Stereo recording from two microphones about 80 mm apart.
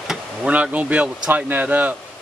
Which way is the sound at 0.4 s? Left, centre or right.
Centre.